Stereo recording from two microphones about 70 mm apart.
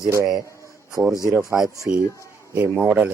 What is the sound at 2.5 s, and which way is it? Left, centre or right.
Speech, right.